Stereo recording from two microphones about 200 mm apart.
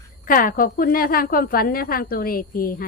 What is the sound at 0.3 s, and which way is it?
A woman's voice, 45° left (ahead or behind).